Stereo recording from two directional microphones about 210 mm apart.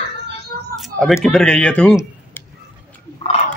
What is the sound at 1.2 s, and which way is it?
Speech, 5° left (ahead or behind).